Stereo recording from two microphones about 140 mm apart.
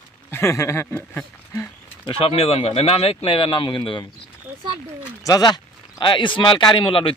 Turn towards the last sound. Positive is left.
turn(degrees=35)  # may be behind; listen again after turning